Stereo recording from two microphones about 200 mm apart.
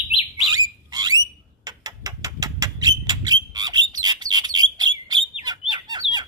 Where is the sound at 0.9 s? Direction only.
20° right (ahead or behind).